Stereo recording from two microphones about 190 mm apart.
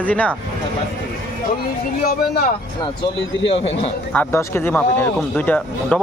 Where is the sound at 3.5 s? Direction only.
30° left (ahead or behind).